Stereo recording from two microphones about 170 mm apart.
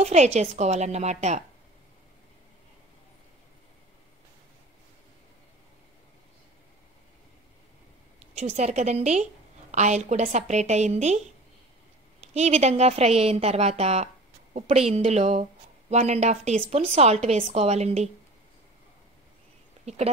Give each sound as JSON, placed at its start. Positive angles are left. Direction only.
{"t": 0.0, "sound": "a woman's voice", "side_deg": -40}
{"t": 8.2, "sound": "a woman's voice", "side_deg": -40}
{"t": 12.4, "sound": "a woman's voice", "side_deg": -40}
{"t": 19.8, "sound": "speech", "side_deg": -40}